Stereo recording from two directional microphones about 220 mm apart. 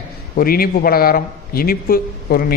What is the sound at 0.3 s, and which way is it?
A man's voice, 40° left (ahead or behind).